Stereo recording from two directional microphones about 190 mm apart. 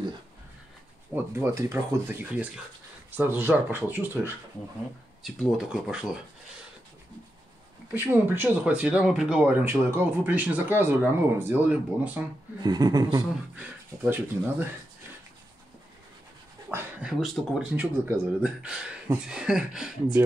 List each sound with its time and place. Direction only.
1.1 s speech: 15° right (ahead or behind)
7.9 s speech: 10° right (ahead or behind)
12.6 s speech: 20° right (ahead or behind)
13.6 s speech: 10° right (ahead or behind)
16.6 s speech: 5° right (ahead or behind)